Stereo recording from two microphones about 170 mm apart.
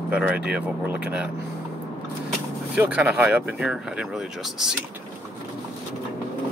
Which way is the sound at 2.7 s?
5° right (ahead or behind).